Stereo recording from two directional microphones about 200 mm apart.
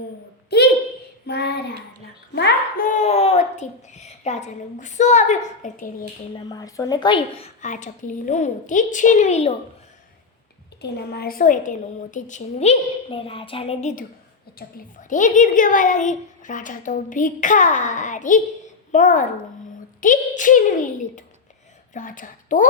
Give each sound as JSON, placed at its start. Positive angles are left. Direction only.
{"t": 1.3, "sound": "child singing", "side_deg": 55}
{"t": 2.3, "sound": "a sound", "side_deg": 50}
{"t": 6.3, "sound": "a woman's voice", "side_deg": 20}
{"t": 10.8, "sound": "a woman's voice", "side_deg": 55}
{"t": 14.6, "sound": "a child's voice", "side_deg": 50}
{"t": 15.1, "sound": "a woman's voice", "side_deg": 40}